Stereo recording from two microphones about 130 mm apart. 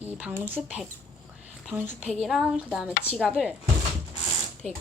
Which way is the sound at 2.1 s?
Centre (ahead or behind).